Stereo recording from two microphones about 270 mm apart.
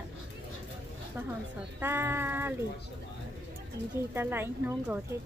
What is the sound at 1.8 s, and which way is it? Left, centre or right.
Speech, centre.